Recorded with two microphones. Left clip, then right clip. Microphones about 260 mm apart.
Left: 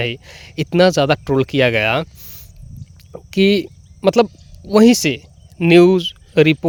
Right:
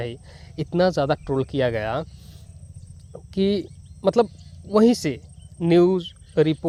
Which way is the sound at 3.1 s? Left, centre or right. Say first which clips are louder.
Left 8 dB; left.